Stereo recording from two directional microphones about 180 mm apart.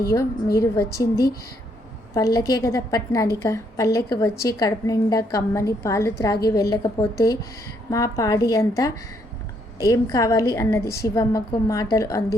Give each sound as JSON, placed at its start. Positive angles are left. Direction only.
{"t": 0.0, "sound": "a woman's voice", "side_deg": 15}